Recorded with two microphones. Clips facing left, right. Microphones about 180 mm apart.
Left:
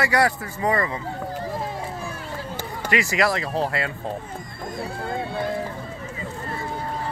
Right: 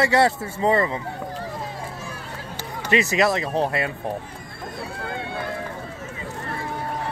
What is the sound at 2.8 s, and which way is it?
Speech, 20° right (ahead or behind).